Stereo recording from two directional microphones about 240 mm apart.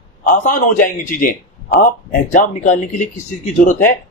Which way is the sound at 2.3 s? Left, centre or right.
Left.